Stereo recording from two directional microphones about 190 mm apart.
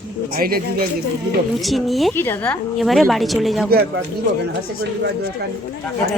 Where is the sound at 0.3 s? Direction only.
50° right (ahead or behind).